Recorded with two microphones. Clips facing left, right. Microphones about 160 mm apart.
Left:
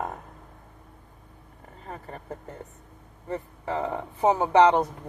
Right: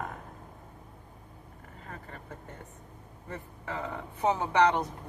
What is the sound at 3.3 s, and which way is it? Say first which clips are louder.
Speech: left 8 dB; 20° left (ahead or behind).